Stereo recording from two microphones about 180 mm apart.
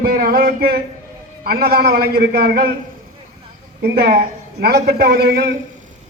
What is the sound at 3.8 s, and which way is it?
A man's voice, 60° right (ahead or behind).